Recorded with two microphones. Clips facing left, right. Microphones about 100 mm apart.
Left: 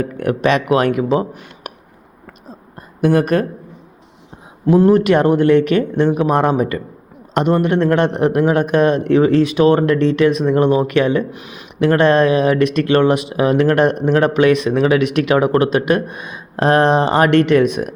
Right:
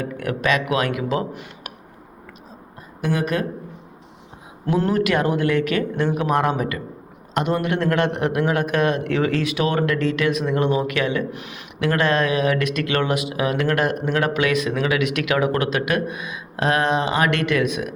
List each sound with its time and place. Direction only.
0.0 s speech: 35° left (ahead or behind)
3.0 s speech: 50° left (ahead or behind)
4.9 s speech: 30° left (ahead or behind)